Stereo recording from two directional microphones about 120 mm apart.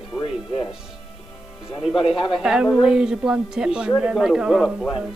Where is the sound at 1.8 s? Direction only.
60° left (ahead or behind).